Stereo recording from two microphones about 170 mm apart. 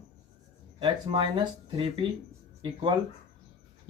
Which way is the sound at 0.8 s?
25° right (ahead or behind).